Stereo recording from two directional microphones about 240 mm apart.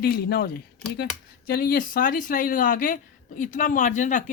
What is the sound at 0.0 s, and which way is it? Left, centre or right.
A woman's voice, left.